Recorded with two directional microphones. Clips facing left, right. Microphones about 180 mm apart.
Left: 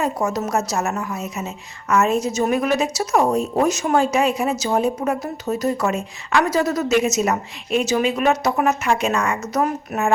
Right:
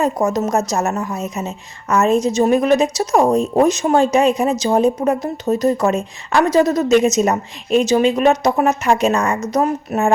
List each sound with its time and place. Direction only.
0.0 s speech: 40° right (ahead or behind)